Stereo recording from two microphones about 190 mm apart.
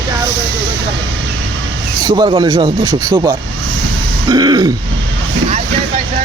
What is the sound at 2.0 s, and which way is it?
Speech, 20° right (ahead or behind).